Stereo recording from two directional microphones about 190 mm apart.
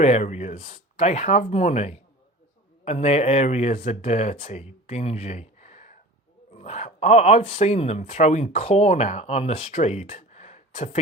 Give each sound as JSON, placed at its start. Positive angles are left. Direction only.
{"t": 0.0, "sound": "speech", "side_deg": 35}